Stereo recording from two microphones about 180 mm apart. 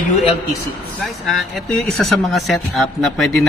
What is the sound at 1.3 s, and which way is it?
A man's voice, centre (ahead or behind).